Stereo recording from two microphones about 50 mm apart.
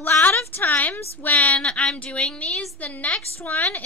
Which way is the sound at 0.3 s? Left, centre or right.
Left.